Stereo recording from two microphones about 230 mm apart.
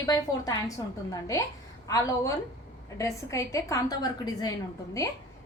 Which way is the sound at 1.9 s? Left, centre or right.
Centre.